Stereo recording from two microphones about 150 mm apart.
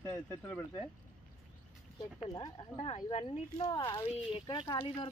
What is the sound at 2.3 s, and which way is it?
Speech, 25° left (ahead or behind).